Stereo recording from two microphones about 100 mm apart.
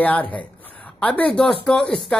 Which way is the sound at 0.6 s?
15° left (ahead or behind).